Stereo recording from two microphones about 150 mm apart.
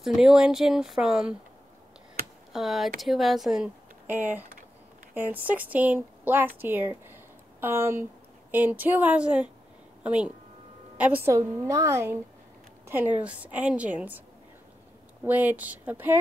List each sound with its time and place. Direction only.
0.0 s speech: centre (ahead or behind)
2.5 s a woman's voice: centre (ahead or behind)
15.2 s speech: 10° right (ahead or behind)